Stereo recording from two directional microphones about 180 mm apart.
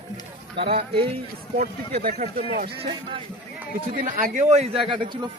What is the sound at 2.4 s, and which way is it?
Speech, 65° right (ahead or behind).